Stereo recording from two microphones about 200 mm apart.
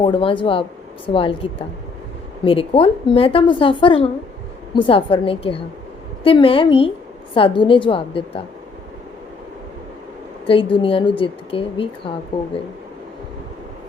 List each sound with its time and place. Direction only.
0.0 s a woman's voice: 25° left (ahead or behind)
10.4 s a woman's voice: 25° left (ahead or behind)